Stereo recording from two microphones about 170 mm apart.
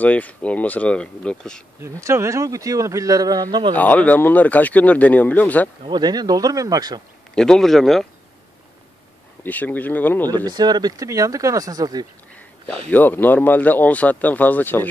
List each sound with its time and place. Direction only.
0.0 s speech: 10° left (ahead or behind)
1.8 s speech: 15° right (ahead or behind)
3.7 s speech: 10° left (ahead or behind)
5.9 s speech: 25° right (ahead or behind)
7.3 s speech: 5° left (ahead or behind)
9.4 s speech: 10° left (ahead or behind)
10.4 s speech: 25° right (ahead or behind)
12.9 s speech: 10° left (ahead or behind)